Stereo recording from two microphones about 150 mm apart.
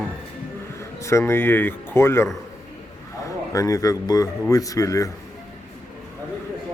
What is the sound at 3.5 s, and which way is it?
A man's voice, 20° left (ahead or behind).